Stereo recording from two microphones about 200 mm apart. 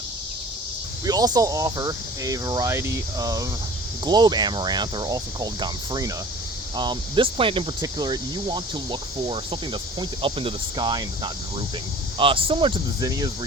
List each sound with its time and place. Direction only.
1.0 s speech: 20° right (ahead or behind)